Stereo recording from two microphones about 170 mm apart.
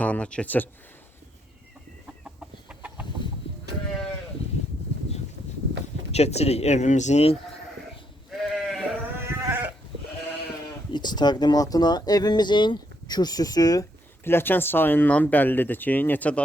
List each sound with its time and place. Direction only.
0.0 s speech: 10° left (ahead or behind)
2.2 s chicken: 5° right (ahead or behind)
3.5 s livestock: 35° left (ahead or behind)
6.1 s speech: 40° left (ahead or behind)
8.3 s sheep: centre (ahead or behind)
9.2 s sheep: 10° right (ahead or behind)
10.9 s speech: 25° left (ahead or behind); by 16.4 s 10° left (ahead or behind)